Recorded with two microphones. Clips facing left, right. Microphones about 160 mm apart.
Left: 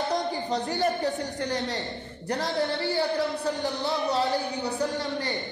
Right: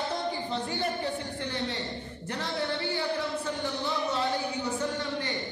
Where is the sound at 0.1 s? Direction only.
40° left (ahead or behind).